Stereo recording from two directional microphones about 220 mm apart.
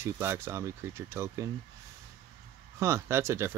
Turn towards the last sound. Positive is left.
turn(degrees=-10)  # may be behind; listen again after turning